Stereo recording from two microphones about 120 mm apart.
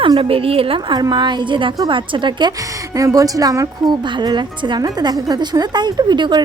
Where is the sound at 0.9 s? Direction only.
35° right (ahead or behind).